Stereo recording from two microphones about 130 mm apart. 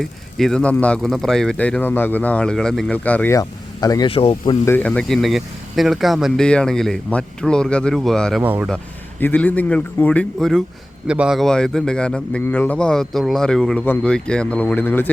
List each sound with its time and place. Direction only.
0.0 s a man's voice: 5° left (ahead or behind)
3.3 s speech: 25° left (ahead or behind)
4.1 s speech: 45° left (ahead or behind)
4.6 s a man's voice: 15° left (ahead or behind)
4.9 s speech: 5° left (ahead or behind)
8.4 s speech: 15° right (ahead or behind)
9.2 s a man's voice: 15° left (ahead or behind)
11.0 s a man's voice: 5° right (ahead or behind); by 15.1 s 15° left (ahead or behind)